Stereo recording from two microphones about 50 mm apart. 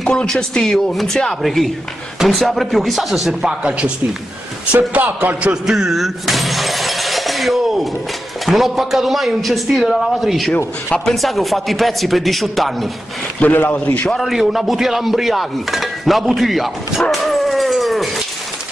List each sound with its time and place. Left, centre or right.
0.0 s speech: centre
3.4 s speech: right
4.7 s speech: right
5.7 s shatter: centre
8.5 s speech: centre
13.4 s a man's voice: left
14.2 s speech: centre
17.1 s dog: centre